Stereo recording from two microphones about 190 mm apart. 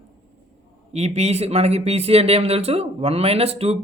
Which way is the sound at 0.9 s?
35° right (ahead or behind).